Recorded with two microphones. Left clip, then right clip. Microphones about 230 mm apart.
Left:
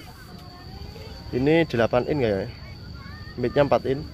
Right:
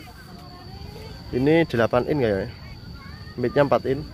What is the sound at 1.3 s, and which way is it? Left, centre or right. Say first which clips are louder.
Speech: right 1 dB; centre.